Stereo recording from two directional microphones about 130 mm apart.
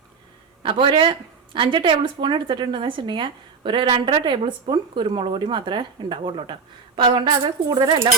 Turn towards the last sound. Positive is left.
turn(degrees=-35)  # may be behind; listen again after turning